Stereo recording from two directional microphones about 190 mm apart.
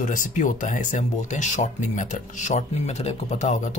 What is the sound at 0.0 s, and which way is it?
Speech, 40° left (ahead or behind).